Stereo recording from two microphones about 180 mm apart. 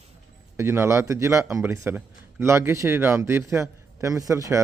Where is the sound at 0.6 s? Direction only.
15° right (ahead or behind).